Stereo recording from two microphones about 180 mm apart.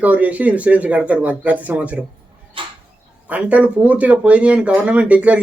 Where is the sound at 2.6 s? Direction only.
30° right (ahead or behind).